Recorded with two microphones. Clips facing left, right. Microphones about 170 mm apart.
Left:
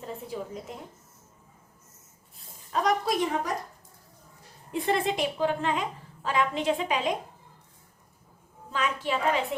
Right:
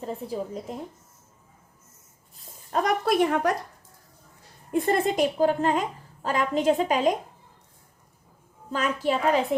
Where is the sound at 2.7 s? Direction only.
55° right (ahead or behind).